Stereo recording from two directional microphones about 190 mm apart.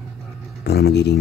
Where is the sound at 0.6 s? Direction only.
60° left (ahead or behind).